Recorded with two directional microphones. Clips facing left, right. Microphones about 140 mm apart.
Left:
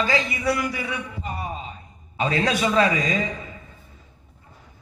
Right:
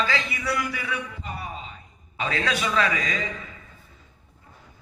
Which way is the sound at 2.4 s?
30° left (ahead or behind).